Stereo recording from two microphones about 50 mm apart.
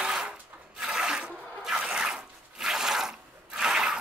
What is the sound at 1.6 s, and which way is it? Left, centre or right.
Zipper, centre.